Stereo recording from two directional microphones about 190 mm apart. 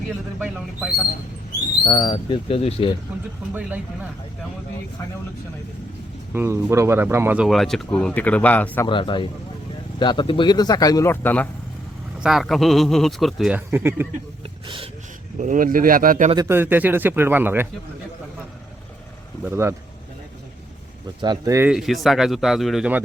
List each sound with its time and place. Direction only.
0.3 s speech: 5° right (ahead or behind)
1.8 s speech: 20° left (ahead or behind)
3.5 s speech: 10° right (ahead or behind)
6.3 s speech: 15° right (ahead or behind); by 8.9 s 10° left (ahead or behind)
8.9 s speech: 25° left (ahead or behind); by 11.4 s 10° left (ahead or behind)
12.2 s speech: centre (ahead or behind)
13.7 s speech: 10° right (ahead or behind)
15.4 s speech: 45° right (ahead or behind)
16.3 s speech: 15° right (ahead or behind)
19.5 s speech: 15° right (ahead or behind)
21.2 s speech: 20° right (ahead or behind)
21.7 s speech: centre (ahead or behind)